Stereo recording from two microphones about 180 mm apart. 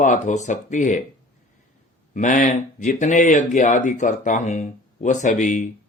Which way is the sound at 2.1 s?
45° left (ahead or behind).